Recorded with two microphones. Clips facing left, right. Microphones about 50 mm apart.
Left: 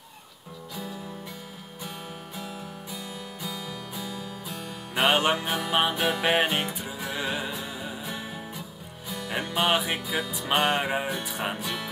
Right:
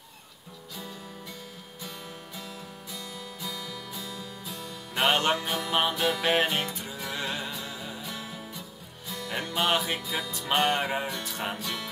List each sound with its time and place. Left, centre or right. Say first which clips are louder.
2.3 s music: left 4 dB; centre